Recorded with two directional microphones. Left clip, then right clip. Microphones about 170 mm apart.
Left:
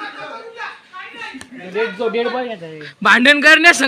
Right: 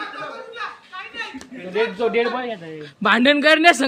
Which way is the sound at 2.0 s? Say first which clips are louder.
Left 2 dB; 60° left (ahead or behind).